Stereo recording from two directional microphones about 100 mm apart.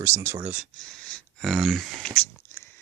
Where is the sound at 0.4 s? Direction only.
10° right (ahead or behind).